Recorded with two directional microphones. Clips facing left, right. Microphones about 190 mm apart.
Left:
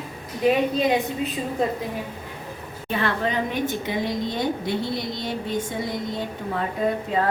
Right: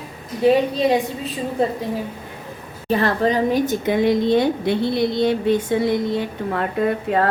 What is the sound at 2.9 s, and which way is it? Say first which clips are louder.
A woman's voice: right 6 dB; 40° right (ahead or behind).